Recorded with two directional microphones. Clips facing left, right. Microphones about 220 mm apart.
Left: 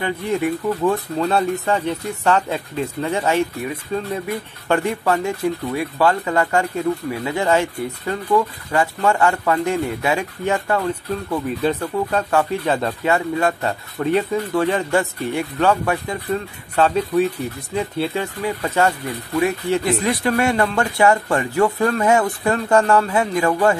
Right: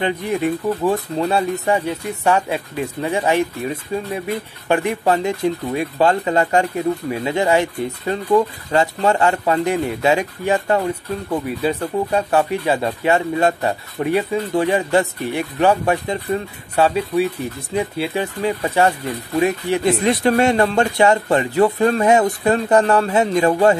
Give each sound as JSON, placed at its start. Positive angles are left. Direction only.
{"t": 0.0, "sound": "speech", "side_deg": -20}
{"t": 13.1, "sound": "speech", "side_deg": -20}